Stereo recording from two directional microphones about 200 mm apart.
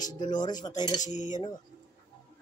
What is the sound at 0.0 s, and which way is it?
Speech, 20° left (ahead or behind).